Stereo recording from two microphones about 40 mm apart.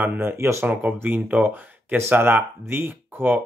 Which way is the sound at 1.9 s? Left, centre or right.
Right.